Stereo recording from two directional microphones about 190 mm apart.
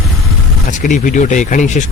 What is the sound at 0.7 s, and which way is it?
Speech, 40° left (ahead or behind).